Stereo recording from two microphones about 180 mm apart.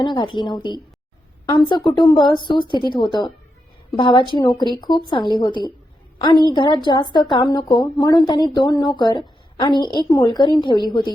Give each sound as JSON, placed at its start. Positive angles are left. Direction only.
{"t": 0.0, "sound": "a woman's voice", "side_deg": 25}
{"t": 1.9, "sound": "a woman's voice", "side_deg": 25}